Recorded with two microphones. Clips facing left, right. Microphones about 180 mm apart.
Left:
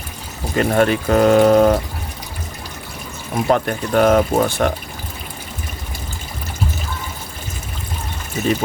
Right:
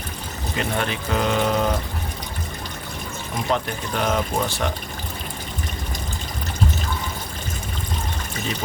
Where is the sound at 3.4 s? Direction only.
50° left (ahead or behind).